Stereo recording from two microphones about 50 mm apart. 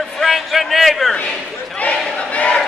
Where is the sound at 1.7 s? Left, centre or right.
Left.